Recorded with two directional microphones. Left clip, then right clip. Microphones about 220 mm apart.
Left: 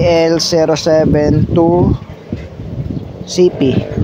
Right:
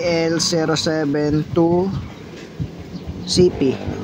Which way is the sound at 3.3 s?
10° left (ahead or behind).